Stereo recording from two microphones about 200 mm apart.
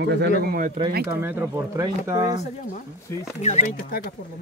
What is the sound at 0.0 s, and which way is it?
Speech, 60° right (ahead or behind).